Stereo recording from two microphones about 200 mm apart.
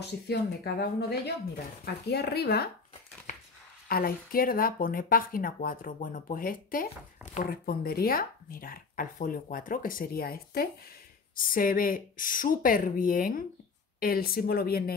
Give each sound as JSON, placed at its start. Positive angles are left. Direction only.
{"t": 0.0, "sound": "speech", "side_deg": 55}
{"t": 3.9, "sound": "speech", "side_deg": 50}